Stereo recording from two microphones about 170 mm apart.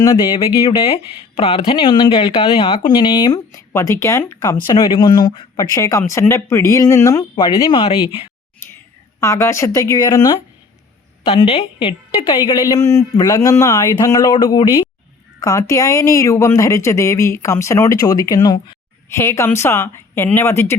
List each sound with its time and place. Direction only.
1.4 s speech: 30° left (ahead or behind)
7.3 s speech: 30° left (ahead or behind)
9.2 s speech: 15° left (ahead or behind)
11.3 s speech: 35° left (ahead or behind)
12.6 s speech: 20° left (ahead or behind)